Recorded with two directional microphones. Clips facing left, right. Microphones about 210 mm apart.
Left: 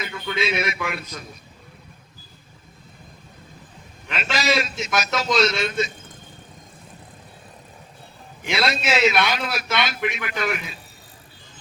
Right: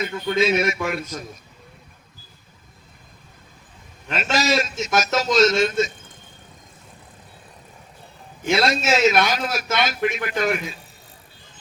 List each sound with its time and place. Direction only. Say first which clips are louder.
0.0 s a man's voice: right 6 dB; 45° right (ahead or behind)
4.1 s a man's voice: right 2 dB; 45° right (ahead or behind)
8.4 s a man's voice: right 4 dB; 45° right (ahead or behind)